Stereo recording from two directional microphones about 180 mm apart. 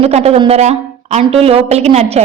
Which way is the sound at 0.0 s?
35° right (ahead or behind).